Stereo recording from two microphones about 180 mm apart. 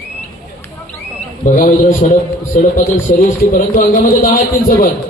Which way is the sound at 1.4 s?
45° left (ahead or behind).